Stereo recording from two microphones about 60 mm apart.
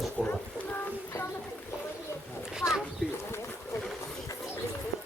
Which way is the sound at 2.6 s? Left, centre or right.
Left.